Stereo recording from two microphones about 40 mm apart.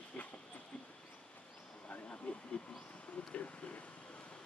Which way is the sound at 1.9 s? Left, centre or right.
Left.